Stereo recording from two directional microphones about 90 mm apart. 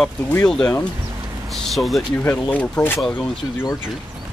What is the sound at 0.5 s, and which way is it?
Speech, 10° left (ahead or behind).